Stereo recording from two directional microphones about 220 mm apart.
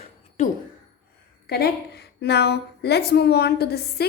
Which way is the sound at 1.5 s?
45° left (ahead or behind).